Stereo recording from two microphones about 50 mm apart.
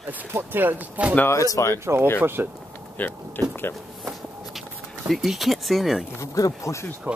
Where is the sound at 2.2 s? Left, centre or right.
Right.